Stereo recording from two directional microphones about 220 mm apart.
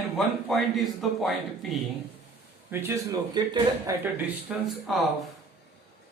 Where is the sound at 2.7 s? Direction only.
15° right (ahead or behind).